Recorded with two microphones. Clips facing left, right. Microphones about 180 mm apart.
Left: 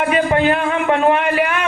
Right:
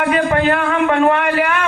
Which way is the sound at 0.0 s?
20° left (ahead or behind).